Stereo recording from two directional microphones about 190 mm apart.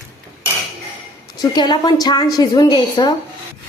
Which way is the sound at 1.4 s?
20° left (ahead or behind).